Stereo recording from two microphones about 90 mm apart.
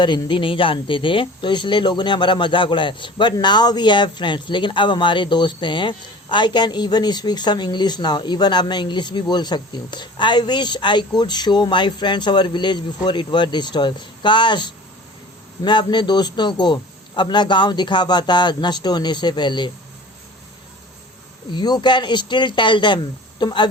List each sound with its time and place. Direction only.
0.3 s speech: 75° left (ahead or behind)
21.5 s speech: 55° left (ahead or behind)